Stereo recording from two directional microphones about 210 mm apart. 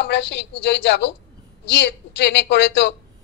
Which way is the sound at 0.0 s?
55° left (ahead or behind).